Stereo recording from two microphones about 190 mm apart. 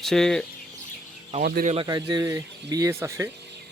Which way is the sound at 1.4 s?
55° right (ahead or behind).